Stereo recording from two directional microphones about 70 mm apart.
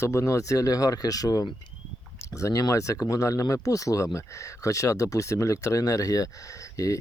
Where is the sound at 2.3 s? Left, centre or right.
Left.